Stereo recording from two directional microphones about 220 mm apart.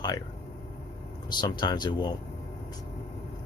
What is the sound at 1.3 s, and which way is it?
Speech, 20° left (ahead or behind).